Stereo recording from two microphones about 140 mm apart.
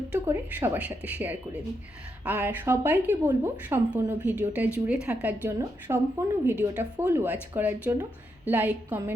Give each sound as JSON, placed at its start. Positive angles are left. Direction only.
{"t": 0.1, "sound": "a woman's voice", "side_deg": -15}